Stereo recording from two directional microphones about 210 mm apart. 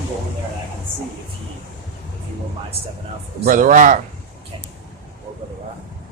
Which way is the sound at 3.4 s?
40° right (ahead or behind).